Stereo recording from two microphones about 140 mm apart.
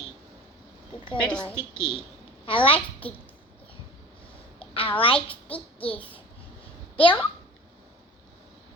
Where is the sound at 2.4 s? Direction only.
40° left (ahead or behind).